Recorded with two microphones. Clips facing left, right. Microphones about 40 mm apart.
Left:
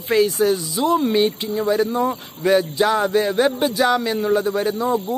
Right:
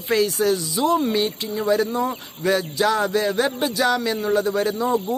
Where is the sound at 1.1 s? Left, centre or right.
Centre.